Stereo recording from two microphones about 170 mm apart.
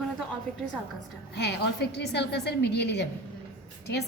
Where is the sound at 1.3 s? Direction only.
80° left.